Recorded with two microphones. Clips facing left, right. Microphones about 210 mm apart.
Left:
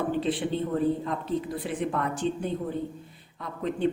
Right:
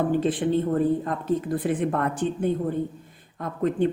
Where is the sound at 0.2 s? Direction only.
50° right (ahead or behind).